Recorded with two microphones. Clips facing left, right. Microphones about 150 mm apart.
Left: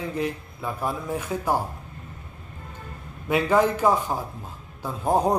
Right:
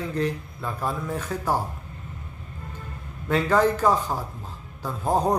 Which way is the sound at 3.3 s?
15° left (ahead or behind).